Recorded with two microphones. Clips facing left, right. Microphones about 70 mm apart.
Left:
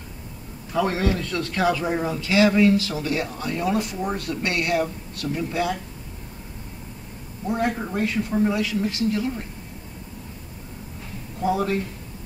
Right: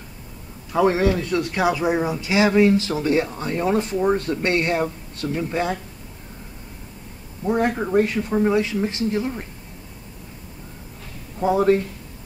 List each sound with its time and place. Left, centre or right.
0.7 s speech: right
7.4 s speech: right
11.4 s speech: right